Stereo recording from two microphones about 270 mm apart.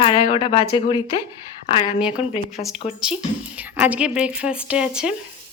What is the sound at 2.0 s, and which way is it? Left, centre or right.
A woman's voice, centre.